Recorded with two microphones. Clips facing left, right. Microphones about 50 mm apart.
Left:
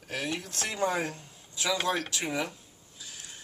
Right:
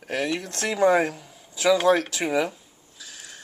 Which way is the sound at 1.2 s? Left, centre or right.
Right.